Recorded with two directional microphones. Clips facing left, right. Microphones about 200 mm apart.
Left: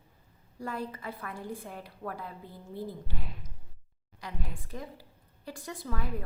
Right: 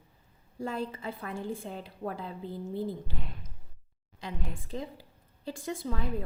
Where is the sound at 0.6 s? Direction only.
25° right (ahead or behind).